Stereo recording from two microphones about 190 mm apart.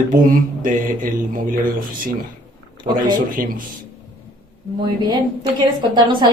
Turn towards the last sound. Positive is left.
turn(degrees=-25)  # may be behind; listen again after turning